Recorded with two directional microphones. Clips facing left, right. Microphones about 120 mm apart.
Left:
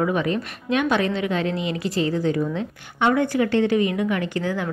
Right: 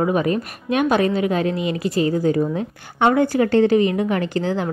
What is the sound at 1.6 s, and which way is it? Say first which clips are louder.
Speech: right 3 dB; 25° left (ahead or behind).